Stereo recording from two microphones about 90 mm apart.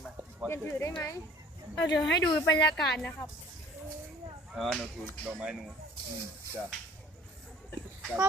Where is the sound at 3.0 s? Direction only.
20° left (ahead or behind).